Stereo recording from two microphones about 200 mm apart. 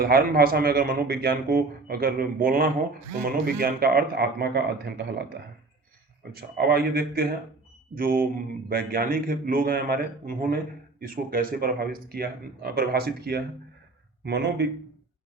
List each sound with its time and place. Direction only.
0.0 s speech: 50° right (ahead or behind)